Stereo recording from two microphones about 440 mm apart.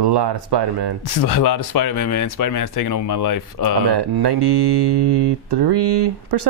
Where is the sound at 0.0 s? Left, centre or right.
Right.